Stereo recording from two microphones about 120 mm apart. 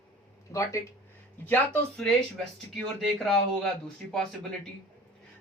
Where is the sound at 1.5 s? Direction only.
15° left (ahead or behind).